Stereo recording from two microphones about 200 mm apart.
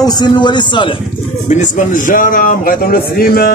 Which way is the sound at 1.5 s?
40° left (ahead or behind).